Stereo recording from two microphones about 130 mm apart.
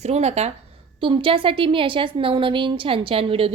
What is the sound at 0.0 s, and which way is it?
A woman's voice, 55° right (ahead or behind).